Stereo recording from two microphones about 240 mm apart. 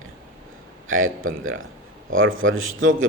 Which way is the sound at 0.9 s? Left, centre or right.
Right.